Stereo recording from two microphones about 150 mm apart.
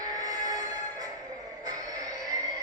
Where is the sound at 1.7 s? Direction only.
25° right (ahead or behind).